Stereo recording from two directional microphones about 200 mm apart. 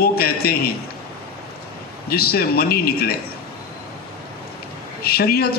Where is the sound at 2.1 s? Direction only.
50° left (ahead or behind).